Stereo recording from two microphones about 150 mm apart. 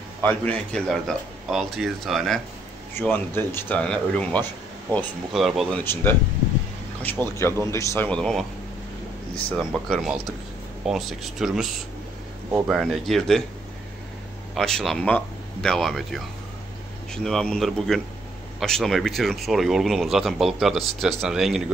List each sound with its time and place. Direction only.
0.2 s speech: 10° left (ahead or behind)
3.0 s speech: 15° left (ahead or behind); by 5.7 s centre (ahead or behind)
5.7 s a man's voice: 10° left (ahead or behind)
8.1 s speech: 5° left (ahead or behind)
9.6 s speech: centre (ahead or behind)
14.5 s speech: 5° left (ahead or behind)